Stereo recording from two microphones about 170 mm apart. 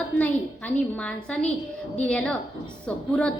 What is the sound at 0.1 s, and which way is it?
A woman's voice, 5° left (ahead or behind).